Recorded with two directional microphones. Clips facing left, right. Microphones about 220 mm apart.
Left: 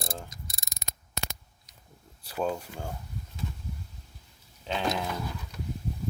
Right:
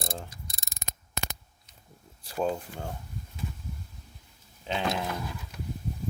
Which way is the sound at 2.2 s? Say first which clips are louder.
Right 1 dB; centre (ahead or behind).